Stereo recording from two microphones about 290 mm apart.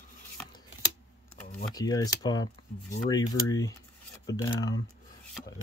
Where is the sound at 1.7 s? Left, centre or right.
Centre.